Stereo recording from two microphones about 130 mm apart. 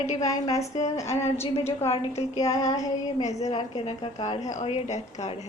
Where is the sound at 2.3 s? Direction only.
25° left (ahead or behind).